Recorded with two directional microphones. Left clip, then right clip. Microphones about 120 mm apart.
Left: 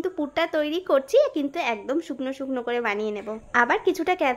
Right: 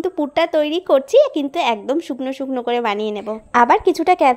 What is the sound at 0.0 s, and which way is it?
A woman's voice, 40° right (ahead or behind).